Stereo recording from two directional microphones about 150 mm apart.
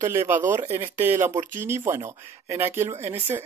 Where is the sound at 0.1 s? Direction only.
15° right (ahead or behind).